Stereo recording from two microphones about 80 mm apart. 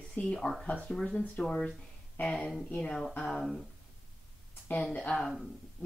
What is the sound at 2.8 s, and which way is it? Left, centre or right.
Speech, centre.